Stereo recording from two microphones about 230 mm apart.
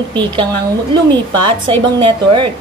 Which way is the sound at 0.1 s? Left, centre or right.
Centre.